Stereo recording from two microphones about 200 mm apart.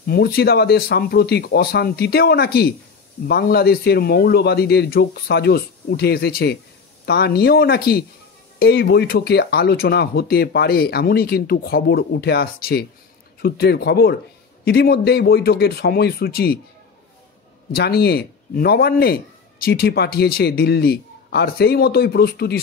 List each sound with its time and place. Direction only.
0.0 s speech: 50° left (ahead or behind)
17.7 s speech: 55° left (ahead or behind)